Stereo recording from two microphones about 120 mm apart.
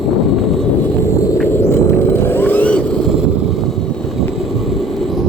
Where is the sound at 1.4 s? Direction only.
20° left (ahead or behind).